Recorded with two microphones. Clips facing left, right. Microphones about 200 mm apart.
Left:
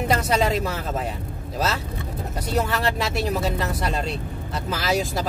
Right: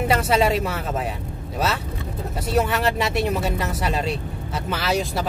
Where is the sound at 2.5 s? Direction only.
Centre (ahead or behind).